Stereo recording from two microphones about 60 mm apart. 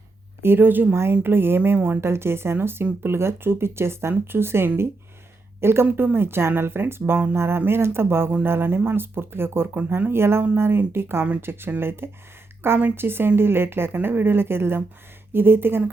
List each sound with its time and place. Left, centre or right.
0.4 s speech: right